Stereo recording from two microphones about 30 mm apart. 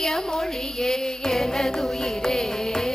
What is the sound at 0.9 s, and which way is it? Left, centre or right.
Music, centre.